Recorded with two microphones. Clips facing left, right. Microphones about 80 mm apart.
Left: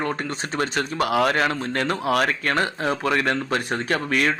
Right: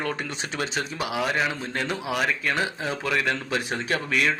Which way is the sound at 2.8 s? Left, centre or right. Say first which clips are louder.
Left 5 dB; left.